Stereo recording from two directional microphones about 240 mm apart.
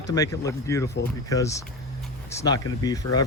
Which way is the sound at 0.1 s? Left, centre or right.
Centre.